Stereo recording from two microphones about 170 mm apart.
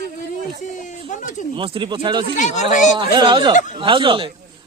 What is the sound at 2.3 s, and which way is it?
Speech, 45° left (ahead or behind).